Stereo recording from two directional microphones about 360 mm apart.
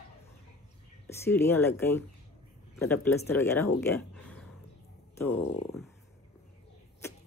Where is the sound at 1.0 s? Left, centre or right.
Centre.